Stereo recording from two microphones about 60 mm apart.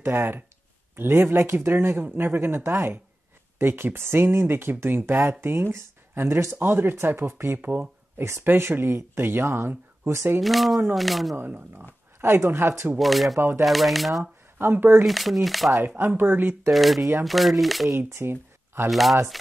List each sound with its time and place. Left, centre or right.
0.0 s speech: right
8.2 s speech: right
10.4 s speech: centre
11.3 s speech: right
12.9 s speech: centre
14.6 s speech: right
15.0 s speech: centre
16.2 s speech: right
16.7 s speech: centre
17.9 s speech: right
18.9 s speech: centre